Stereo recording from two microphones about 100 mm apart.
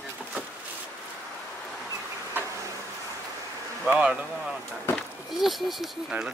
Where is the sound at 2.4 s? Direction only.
20° right (ahead or behind).